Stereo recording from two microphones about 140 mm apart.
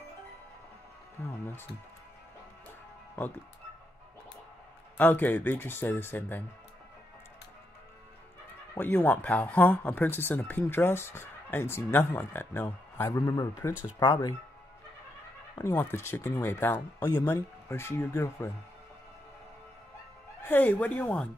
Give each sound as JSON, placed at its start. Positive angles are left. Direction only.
{"t": 4.9, "sound": "speech", "side_deg": 15}
{"t": 8.7, "sound": "speech", "side_deg": 15}
{"t": 15.5, "sound": "speech", "side_deg": 15}
{"t": 20.4, "sound": "speech", "side_deg": 10}